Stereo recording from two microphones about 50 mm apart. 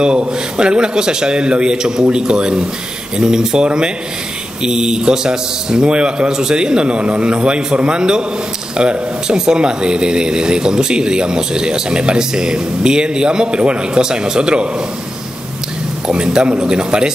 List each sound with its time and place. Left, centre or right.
0.0 s a man's voice: centre
16.1 s a man's voice: centre